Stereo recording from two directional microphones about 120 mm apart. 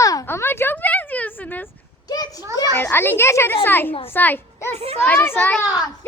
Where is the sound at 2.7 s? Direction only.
20° left (ahead or behind).